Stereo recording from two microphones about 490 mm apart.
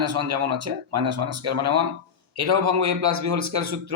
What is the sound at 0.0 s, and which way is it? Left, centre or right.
Speech, right.